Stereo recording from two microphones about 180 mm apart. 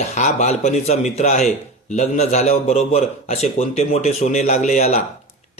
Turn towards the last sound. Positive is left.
turn(degrees=40)  # may be behind; listen again after turning